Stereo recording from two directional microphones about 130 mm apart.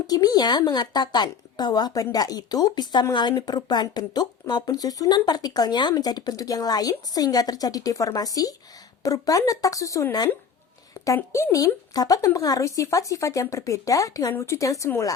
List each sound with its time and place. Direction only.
0.1 s speech: 30° left (ahead or behind)